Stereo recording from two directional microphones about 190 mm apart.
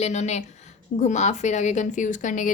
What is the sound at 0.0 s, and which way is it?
A woman's voice, 35° left (ahead or behind).